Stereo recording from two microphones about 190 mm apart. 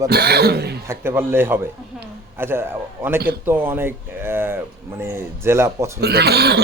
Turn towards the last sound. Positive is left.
turn(degrees=-60)  # may be behind; listen again after turning